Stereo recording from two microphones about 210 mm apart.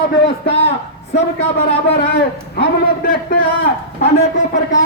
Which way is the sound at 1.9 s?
50° left (ahead or behind).